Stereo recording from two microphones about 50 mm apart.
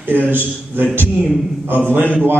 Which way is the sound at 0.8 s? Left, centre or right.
Right.